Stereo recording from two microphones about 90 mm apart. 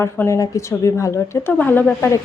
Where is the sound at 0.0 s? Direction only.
30° left (ahead or behind).